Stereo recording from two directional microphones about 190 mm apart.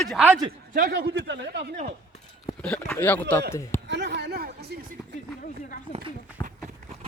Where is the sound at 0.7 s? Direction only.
55° right (ahead or behind); by 1.7 s 70° right (ahead or behind).